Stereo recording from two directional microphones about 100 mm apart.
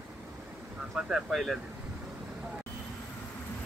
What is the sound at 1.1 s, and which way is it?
Speech, centre (ahead or behind).